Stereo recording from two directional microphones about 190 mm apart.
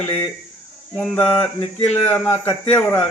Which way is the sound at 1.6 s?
35° left (ahead or behind).